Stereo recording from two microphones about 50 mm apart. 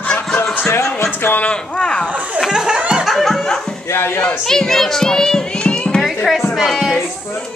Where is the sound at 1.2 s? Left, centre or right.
Left.